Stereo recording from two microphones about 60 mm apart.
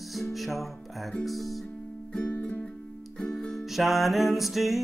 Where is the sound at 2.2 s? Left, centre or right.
Left.